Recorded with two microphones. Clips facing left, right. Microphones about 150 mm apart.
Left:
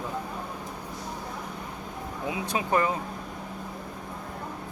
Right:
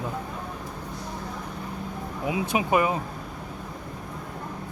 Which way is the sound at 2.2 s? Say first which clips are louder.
Right 4 dB; 20° right (ahead or behind).